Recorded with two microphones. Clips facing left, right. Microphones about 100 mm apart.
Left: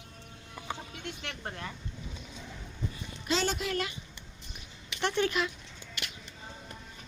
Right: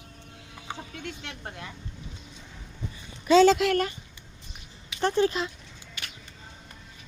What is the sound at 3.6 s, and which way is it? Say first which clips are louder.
Speech: right 10 dB; 90° right.